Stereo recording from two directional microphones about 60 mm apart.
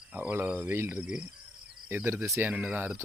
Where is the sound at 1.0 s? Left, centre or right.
Centre.